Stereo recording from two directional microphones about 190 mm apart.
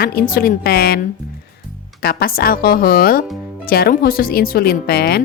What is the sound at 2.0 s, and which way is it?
Speech, 55° left (ahead or behind).